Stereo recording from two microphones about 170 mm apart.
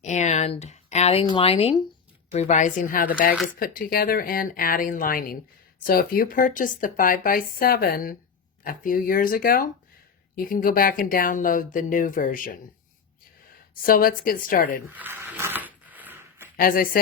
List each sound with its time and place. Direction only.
0.0 s speech: 45° left (ahead or behind)
13.8 s speech: 55° left (ahead or behind)
14.8 s a sound: 10° right (ahead or behind)
16.6 s speech: 55° left (ahead or behind)